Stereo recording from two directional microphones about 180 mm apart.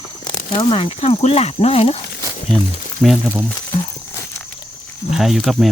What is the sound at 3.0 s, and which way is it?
Speech, 5° right (ahead or behind).